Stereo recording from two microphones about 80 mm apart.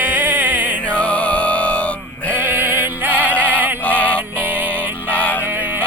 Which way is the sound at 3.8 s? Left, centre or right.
Centre.